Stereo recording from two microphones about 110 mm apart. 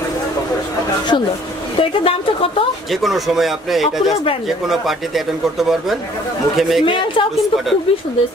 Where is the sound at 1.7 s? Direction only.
55° left (ahead or behind).